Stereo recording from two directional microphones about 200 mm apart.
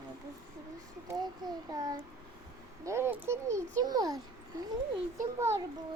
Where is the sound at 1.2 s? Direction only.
20° right (ahead or behind).